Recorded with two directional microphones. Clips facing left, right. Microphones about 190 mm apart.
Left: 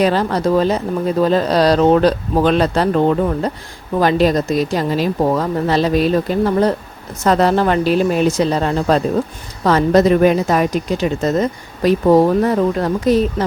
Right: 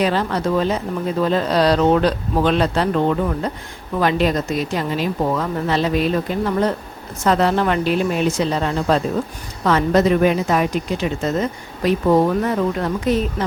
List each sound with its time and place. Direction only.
0.0 s a woman's voice: 40° left (ahead or behind)